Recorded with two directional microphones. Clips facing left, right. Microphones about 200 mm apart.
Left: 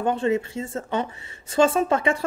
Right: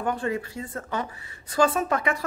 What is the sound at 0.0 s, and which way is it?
A woman's voice, 25° left (ahead or behind).